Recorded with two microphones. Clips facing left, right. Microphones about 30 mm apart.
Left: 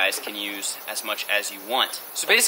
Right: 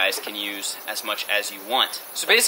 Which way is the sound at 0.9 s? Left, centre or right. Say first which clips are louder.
Right 1 dB; centre.